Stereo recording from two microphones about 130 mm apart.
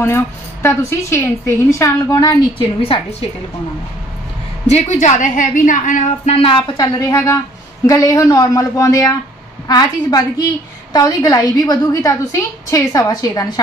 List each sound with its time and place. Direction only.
0.0 s a woman's voice: 20° left (ahead or behind)
2.8 s a woman's voice: 50° left (ahead or behind)
4.6 s a woman's voice: 65° left (ahead or behind); by 6.0 s 90° left
6.2 s a woman's voice: 45° left (ahead or behind)
7.0 s a woman's voice: 25° left (ahead or behind)